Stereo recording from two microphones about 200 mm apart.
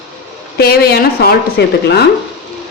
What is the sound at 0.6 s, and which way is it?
A woman's voice, 50° left (ahead or behind).